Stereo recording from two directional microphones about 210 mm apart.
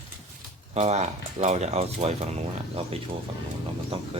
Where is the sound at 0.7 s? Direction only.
30° right (ahead or behind).